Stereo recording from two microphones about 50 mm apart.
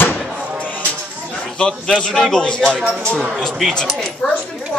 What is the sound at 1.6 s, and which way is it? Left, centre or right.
Speech, centre.